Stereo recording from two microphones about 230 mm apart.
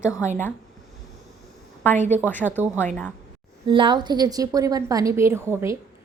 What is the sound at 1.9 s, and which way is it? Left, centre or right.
Speech, right.